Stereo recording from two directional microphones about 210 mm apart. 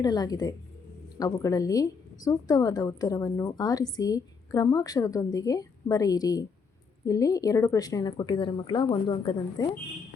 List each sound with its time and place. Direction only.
0.0 s a woman's voice: 20° left (ahead or behind)